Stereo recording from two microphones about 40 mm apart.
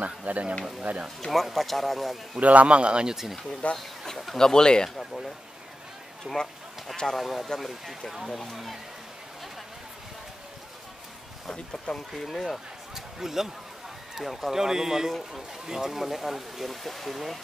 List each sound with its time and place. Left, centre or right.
0.0 s speech: right
1.2 s speech: centre
2.4 s a man's voice: right
3.7 s a sound: centre
4.4 s speech: centre
4.9 s a sound: centre
6.3 s speech: centre
11.5 s speech: centre
12.2 s speech: centre
12.9 s speech: centre
14.5 s a man's voice: centre